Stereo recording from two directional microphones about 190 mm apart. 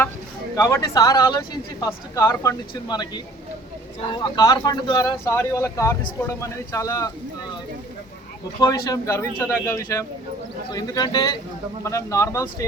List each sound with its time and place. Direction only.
0.5 s speech: 15° left (ahead or behind)
4.1 s speech: 20° left (ahead or behind)
8.6 s speech: 15° left (ahead or behind)